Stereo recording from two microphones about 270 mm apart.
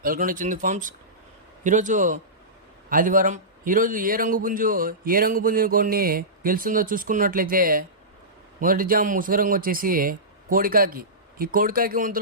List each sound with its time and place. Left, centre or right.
0.0 s a man's voice: right